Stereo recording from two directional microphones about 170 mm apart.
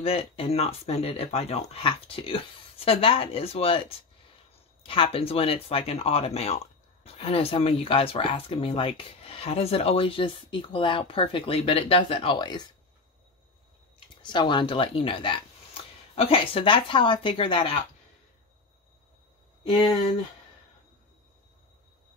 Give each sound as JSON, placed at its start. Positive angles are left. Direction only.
{"t": 0.0, "sound": "speech", "side_deg": 35}
{"t": 13.9, "sound": "speech", "side_deg": 25}